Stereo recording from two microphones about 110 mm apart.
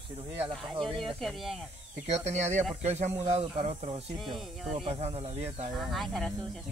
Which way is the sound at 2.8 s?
80° right.